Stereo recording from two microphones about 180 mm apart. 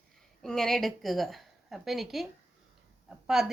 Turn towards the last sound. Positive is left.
turn(degrees=0)  # may be behind; listen again after turning